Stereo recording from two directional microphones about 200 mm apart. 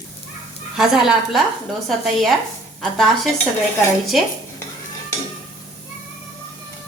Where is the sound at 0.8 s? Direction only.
Centre (ahead or behind).